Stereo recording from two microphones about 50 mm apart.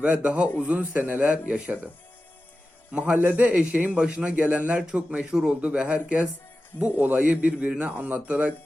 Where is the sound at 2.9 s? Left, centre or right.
Right.